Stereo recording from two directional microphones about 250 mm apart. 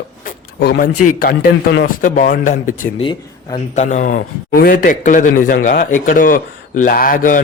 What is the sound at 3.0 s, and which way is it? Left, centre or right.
Speech, centre.